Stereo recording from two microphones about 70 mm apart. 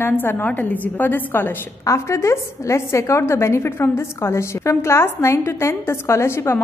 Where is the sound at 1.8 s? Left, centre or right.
Left.